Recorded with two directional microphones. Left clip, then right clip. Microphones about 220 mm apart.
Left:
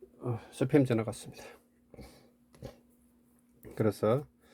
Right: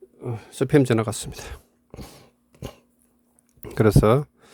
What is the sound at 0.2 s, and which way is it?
Speech, 50° right (ahead or behind).